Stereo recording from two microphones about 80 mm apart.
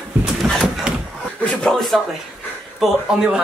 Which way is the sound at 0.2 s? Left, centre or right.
Centre.